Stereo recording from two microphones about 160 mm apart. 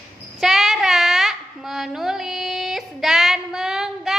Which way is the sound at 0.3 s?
Centre (ahead or behind).